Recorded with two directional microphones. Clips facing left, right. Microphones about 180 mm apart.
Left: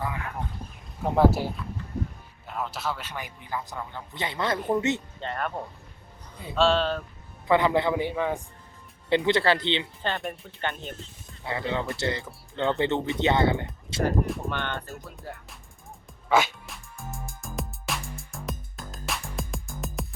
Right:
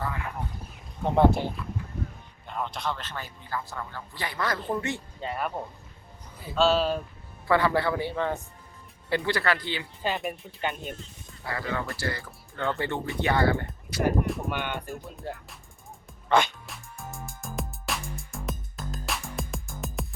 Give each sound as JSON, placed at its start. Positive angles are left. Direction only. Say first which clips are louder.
{"t": 1.0, "sound": "a man's voice", "louder": "even", "side_deg": 5}
{"t": 5.2, "sound": "speech", "louder": "even", "side_deg": -5}
{"t": 7.4, "sound": "speech", "louder": "left 2 dB", "side_deg": 20}
{"t": 10.0, "sound": "speech", "louder": "right 1 dB", "side_deg": -5}
{"t": 11.4, "sound": "speech", "louder": "left 3 dB", "side_deg": 20}
{"t": 14.4, "sound": "speech", "louder": "even", "side_deg": -15}
{"t": 16.3, "sound": "music", "louder": "even", "side_deg": 5}